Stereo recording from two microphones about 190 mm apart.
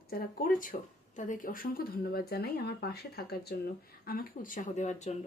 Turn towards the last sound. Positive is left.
turn(degrees=35)  # may be behind; listen again after turning